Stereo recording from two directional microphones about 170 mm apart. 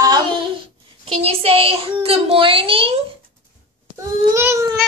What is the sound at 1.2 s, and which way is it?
A child's voice, 35° right (ahead or behind).